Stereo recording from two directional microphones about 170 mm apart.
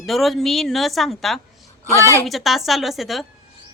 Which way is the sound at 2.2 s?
Centre (ahead or behind).